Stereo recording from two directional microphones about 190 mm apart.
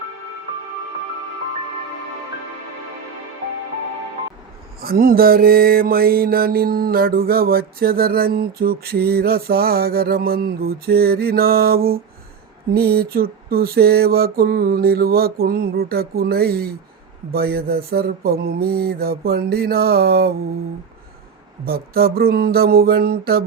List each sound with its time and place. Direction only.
4.8 s mantra: 50° right (ahead or behind)
21.6 s mantra: 55° right (ahead or behind)